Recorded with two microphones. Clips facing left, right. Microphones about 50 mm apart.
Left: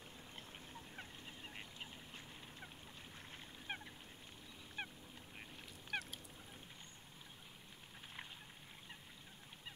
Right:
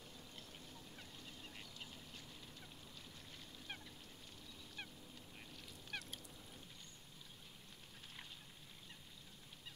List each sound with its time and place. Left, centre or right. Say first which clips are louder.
0.4 s duck: left 3 dB; left
3.6 s fowl: left 5 dB; left
4.8 s goose: left 6 dB; left